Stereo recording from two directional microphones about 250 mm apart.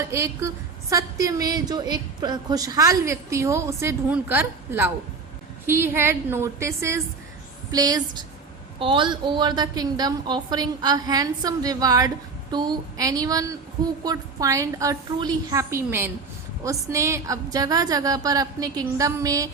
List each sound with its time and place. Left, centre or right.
0.0 s a woman's voice: centre